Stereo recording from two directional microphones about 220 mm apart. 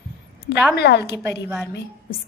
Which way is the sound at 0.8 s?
50° left (ahead or behind).